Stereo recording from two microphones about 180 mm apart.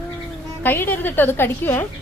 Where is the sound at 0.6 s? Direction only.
10° left (ahead or behind).